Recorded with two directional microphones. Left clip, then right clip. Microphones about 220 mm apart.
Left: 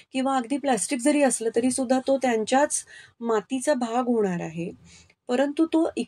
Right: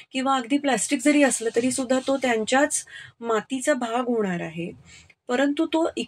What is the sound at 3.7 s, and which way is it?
Speech, 40° left (ahead or behind).